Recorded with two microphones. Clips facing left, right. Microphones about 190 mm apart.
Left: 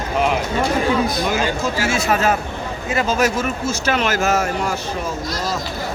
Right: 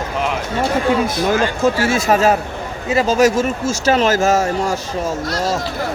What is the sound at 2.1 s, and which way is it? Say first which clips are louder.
Speech: right 5 dB; 40° right (ahead or behind).